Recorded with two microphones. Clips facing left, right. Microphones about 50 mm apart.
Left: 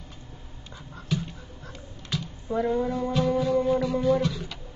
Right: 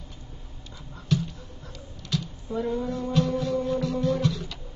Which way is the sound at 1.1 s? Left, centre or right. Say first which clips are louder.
Right 3 dB; centre.